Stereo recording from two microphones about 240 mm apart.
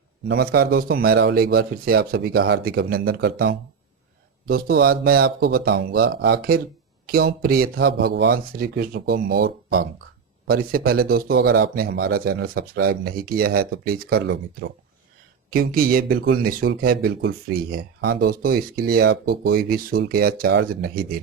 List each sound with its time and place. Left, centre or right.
0.3 s speech: right
15.4 s speech: right